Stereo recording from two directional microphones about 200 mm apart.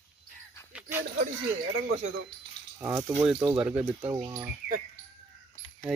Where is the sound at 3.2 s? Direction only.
5° right (ahead or behind).